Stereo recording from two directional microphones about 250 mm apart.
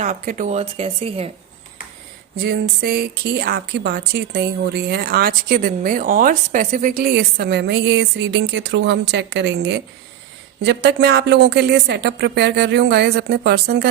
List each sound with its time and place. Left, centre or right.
0.0 s speech: right
2.4 s speech: right